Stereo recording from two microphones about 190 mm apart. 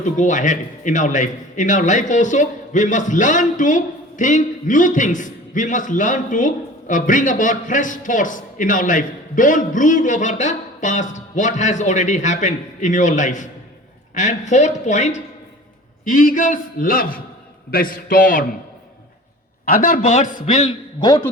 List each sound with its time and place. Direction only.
0.0 s a man's voice: 40° left (ahead or behind)
19.6 s a man's voice: 50° left (ahead or behind)